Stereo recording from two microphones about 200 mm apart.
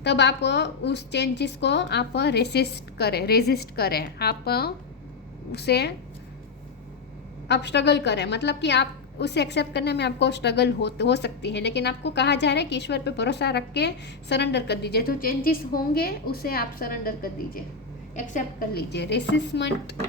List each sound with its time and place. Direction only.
0.0 s a woman's voice: 60° left (ahead or behind)
7.4 s a woman's voice: 60° left (ahead or behind)